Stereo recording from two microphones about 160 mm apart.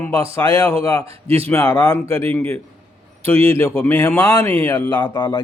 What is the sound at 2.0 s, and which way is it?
Speech, 35° right (ahead or behind).